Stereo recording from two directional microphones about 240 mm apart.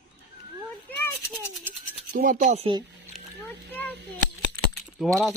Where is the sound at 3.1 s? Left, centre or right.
Centre.